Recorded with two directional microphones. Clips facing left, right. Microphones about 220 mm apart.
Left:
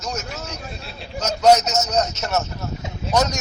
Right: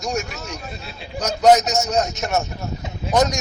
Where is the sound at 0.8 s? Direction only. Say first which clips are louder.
Even; centre (ahead or behind).